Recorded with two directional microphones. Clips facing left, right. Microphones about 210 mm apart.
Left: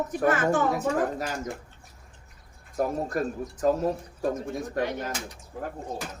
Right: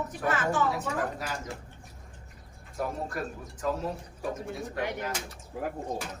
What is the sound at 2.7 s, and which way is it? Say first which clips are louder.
Speech: left 6 dB; 40° left (ahead or behind).